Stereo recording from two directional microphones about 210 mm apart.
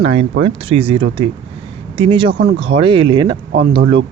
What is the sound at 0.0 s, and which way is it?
Speech, 30° right (ahead or behind).